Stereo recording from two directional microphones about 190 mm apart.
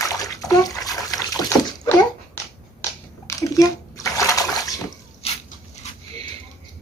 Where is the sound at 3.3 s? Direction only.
15° left (ahead or behind).